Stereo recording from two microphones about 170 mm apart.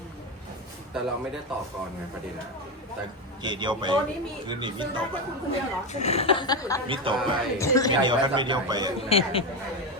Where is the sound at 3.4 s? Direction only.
25° right (ahead or behind).